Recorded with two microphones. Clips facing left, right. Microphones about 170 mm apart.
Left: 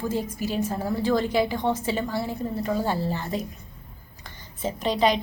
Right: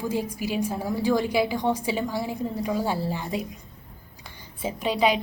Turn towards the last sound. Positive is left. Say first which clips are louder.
# even
turn(degrees=-10)  # may be behind; listen again after turning